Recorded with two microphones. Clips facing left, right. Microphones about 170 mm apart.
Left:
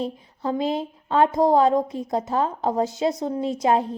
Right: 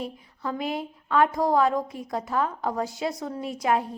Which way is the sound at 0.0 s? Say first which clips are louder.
Left 5 dB; 25° left (ahead or behind).